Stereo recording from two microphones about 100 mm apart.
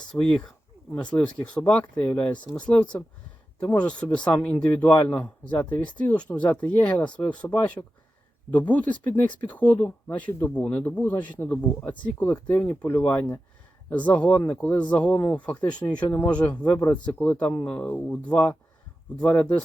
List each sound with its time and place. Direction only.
0.1 s speech: 5° left (ahead or behind)